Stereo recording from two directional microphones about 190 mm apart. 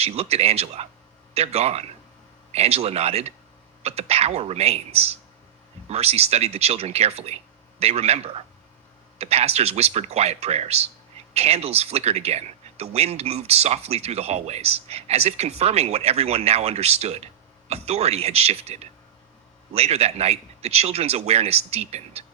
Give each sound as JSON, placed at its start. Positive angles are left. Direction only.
{"t": 0.0, "sound": "speech", "side_deg": -35}